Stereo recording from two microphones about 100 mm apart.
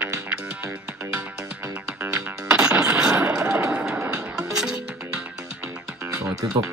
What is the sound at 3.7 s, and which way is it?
Music, 10° right (ahead or behind).